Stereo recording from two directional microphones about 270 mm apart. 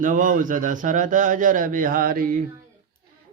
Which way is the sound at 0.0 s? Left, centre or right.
Right.